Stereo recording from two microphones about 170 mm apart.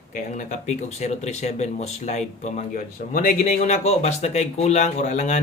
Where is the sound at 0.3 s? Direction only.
45° left (ahead or behind).